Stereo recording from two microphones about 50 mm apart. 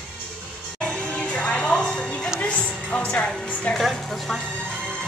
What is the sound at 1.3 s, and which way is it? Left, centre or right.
Music, left.